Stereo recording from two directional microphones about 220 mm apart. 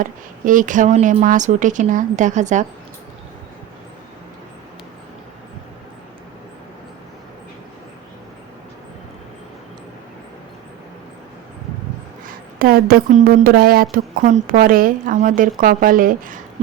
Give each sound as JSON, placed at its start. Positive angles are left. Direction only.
{"t": 0.0, "sound": "a woman's voice", "side_deg": -35}
{"t": 12.5, "sound": "a woman's voice", "side_deg": -40}